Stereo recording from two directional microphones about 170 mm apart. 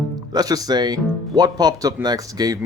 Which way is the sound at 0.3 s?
20° right (ahead or behind).